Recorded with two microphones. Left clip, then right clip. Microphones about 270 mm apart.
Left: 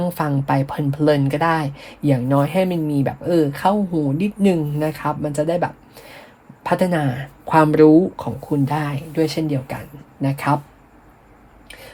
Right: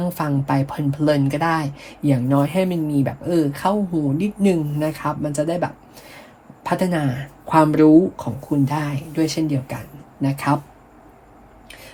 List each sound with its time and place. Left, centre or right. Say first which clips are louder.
0.0 s speech: left 2 dB; left